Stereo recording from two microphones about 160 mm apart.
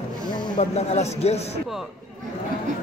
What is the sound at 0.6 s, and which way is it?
Speech, 45° left (ahead or behind).